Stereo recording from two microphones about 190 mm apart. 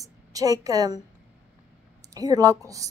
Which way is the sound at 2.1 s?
20° right (ahead or behind).